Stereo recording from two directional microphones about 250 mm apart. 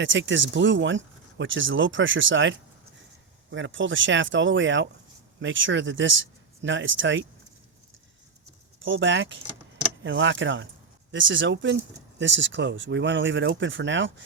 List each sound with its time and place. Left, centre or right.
0.0 s speech: right
8.8 s speech: right